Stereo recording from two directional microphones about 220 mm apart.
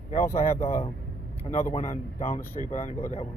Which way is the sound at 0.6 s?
30° left (ahead or behind).